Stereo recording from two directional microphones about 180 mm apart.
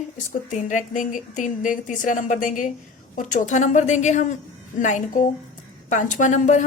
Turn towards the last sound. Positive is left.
turn(degrees=45)  # may be behind; listen again after turning